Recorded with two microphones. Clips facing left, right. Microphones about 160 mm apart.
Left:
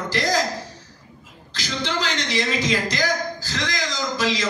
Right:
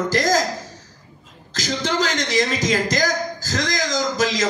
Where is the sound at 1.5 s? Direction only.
45° right (ahead or behind).